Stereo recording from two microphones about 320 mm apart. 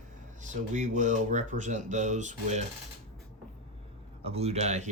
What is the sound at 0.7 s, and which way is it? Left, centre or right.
Speech, right.